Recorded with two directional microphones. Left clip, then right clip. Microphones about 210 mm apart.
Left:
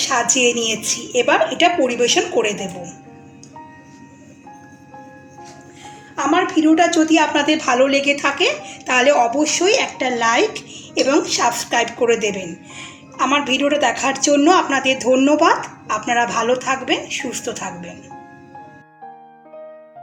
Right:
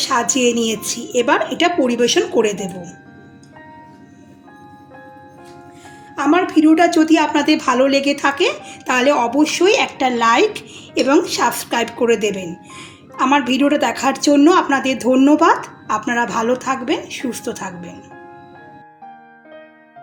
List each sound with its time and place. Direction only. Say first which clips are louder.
0.0 s a woman's voice: even; 50° right (ahead or behind)
6.1 s a woman's voice: right 2 dB; 50° right (ahead or behind)